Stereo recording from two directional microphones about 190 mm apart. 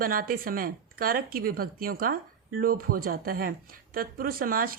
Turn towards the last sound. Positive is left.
turn(degrees=-50)  # may be behind; listen again after turning